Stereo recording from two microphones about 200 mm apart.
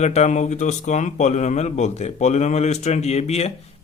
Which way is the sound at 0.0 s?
35° left (ahead or behind).